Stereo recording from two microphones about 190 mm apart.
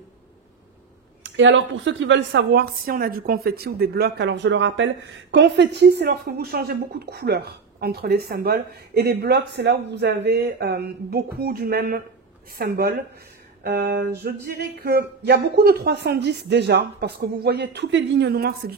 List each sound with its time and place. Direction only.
1.2 s a woman's voice: 75° right (ahead or behind); by 18.8 s 55° right (ahead or behind)